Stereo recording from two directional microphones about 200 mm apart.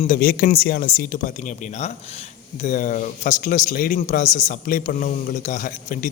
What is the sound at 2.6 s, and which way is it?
A man's voice, 40° left (ahead or behind).